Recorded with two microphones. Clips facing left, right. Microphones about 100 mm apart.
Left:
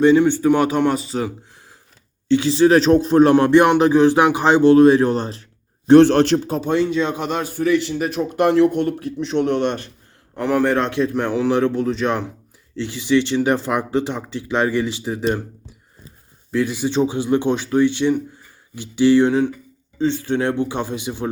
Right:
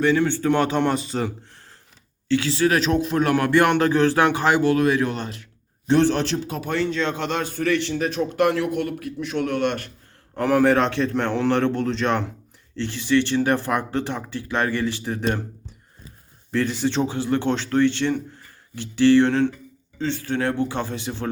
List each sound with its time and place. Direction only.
0.0 s speech: 20° left (ahead or behind); by 1.3 s centre (ahead or behind)
2.2 s speech: 20° left (ahead or behind)
5.9 s speech: 65° left (ahead or behind)
6.5 s speech: 30° left (ahead or behind)
6.7 s speech: 15° left (ahead or behind)
8.4 s speech: 25° left (ahead or behind)
10.3 s a man's voice: centre (ahead or behind)
16.5 s speech: 5° left (ahead or behind)